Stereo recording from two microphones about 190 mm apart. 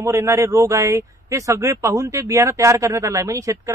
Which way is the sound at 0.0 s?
15° right (ahead or behind).